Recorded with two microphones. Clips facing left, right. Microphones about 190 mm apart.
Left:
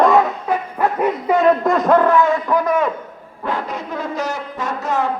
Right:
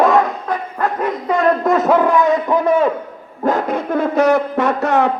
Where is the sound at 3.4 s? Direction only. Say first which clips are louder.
Right 7 dB; 50° right (ahead or behind); by 5.1 s 65° right (ahead or behind).